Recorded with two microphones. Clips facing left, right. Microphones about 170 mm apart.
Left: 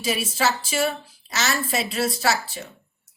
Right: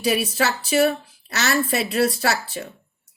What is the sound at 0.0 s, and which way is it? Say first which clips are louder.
A woman's voice: right 3 dB; 60° right (ahead or behind).